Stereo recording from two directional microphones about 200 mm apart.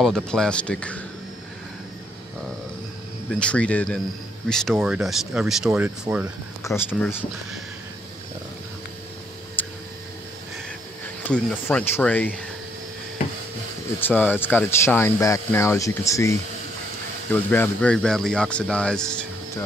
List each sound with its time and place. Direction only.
0.0 s speech: 5° left (ahead or behind)
3.3 s speech: 5° left (ahead or behind)
6.7 s speech: 15° left (ahead or behind)
9.6 s a sound: 10° left (ahead or behind)
11.2 s speech: 5° left (ahead or behind)
13.9 s speech: 10° left (ahead or behind)